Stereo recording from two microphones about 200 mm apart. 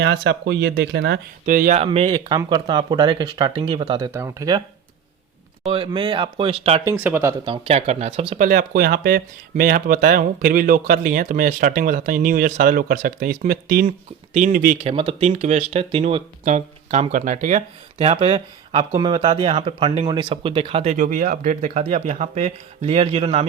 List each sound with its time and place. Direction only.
0.0 s speech: 60° right (ahead or behind)
1.5 s speech: 45° right (ahead or behind)
1.8 s speech: 30° right (ahead or behind)
5.6 s speech: 25° right (ahead or behind)
6.8 s speech: 10° right (ahead or behind)
7.4 s speech: 25° right (ahead or behind)
8.4 s speech: 45° right (ahead or behind)
14.8 s speech: 30° right (ahead or behind)